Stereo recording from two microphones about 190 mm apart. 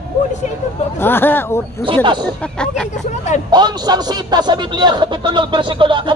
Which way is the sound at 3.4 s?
20° right (ahead or behind).